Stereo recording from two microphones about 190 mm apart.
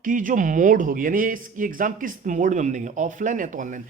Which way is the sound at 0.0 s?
45° right (ahead or behind).